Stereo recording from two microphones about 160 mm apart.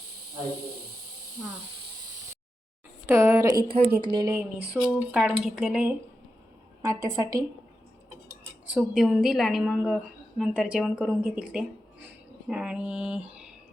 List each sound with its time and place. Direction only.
3.1 s a woman's voice: 15° right (ahead or behind)
4.7 s a woman's voice: 10° right (ahead or behind)
6.8 s a woman's voice: 20° right (ahead or behind)
8.7 s a woman's voice: 5° right (ahead or behind)